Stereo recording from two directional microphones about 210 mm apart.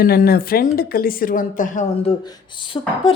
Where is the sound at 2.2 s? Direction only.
20° left (ahead or behind).